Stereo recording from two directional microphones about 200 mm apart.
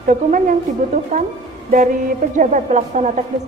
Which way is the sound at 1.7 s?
40° right (ahead or behind).